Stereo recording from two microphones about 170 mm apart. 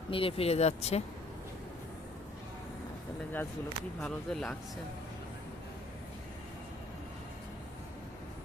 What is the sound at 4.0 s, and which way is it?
Speech, 5° left (ahead or behind).